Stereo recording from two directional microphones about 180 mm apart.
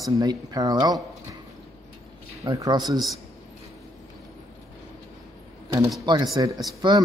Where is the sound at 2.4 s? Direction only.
25° right (ahead or behind).